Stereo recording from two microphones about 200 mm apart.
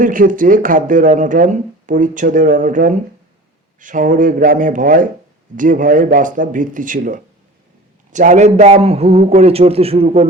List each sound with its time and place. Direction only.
0.0 s speech: 40° right (ahead or behind)